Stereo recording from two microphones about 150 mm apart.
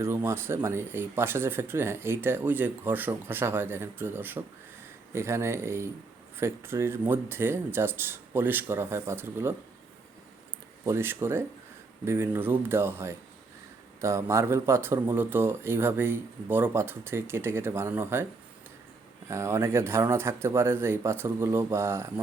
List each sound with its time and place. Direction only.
0.0 s speech: 15° right (ahead or behind)
10.8 s speech: 15° right (ahead or behind)
19.3 s speech: 20° right (ahead or behind)